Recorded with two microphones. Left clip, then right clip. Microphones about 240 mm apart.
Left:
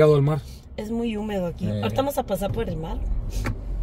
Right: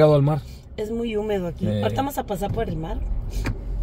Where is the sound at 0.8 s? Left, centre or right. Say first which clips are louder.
Right 3 dB; centre.